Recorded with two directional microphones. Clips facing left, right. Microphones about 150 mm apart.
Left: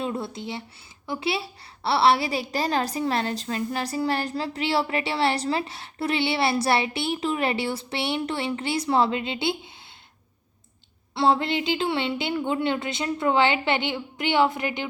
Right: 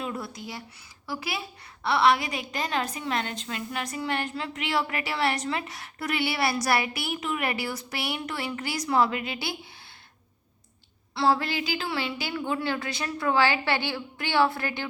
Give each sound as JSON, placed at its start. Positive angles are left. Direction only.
{"t": 0.0, "sound": "a woman's voice", "side_deg": 25}
{"t": 11.1, "sound": "a woman's voice", "side_deg": 25}